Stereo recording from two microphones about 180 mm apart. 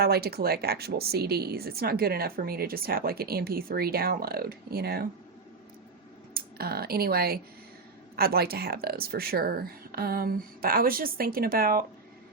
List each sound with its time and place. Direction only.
0.0 s a woman's voice: 60° right (ahead or behind)
6.3 s a woman's voice: 60° right (ahead or behind)